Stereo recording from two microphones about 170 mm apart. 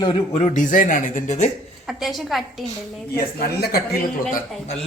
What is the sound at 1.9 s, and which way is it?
Speech, centre (ahead or behind).